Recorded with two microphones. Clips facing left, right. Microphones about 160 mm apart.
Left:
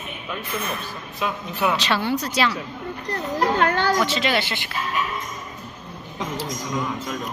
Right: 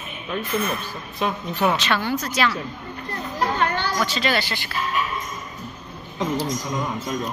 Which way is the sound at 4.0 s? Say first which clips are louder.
Left 1 dB; 20° left (ahead or behind).